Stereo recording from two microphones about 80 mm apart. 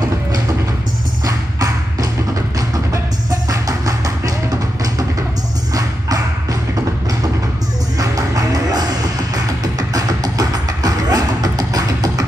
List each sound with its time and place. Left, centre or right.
1.2 s music: right
3.4 s music: right
8.0 s music: right